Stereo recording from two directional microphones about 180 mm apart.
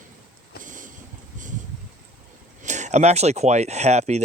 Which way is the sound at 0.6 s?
45° right (ahead or behind).